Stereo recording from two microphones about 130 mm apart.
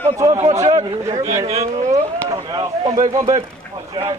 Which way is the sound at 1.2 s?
25° right (ahead or behind).